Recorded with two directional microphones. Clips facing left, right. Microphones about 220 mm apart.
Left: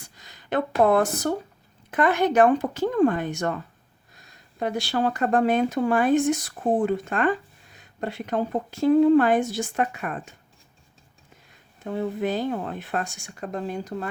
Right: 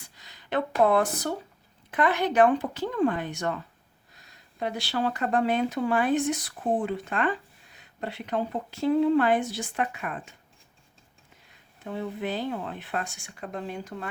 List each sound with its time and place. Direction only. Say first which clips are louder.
0.0 s speech: left 3 dB; 45° left (ahead or behind)
11.9 s speech: left 5 dB; 45° left (ahead or behind)